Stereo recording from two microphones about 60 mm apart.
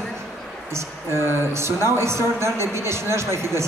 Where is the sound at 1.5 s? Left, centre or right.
Right.